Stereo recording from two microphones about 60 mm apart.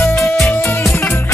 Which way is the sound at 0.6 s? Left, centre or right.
Left.